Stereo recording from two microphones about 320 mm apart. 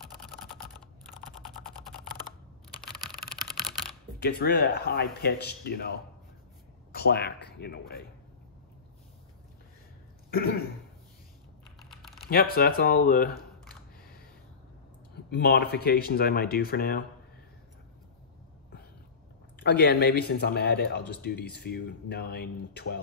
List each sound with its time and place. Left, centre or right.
4.2 s speech: left
6.9 s speech: left
11.6 s computer keyboard: centre
12.3 s speech: left
15.1 s speech: left
19.6 s speech: left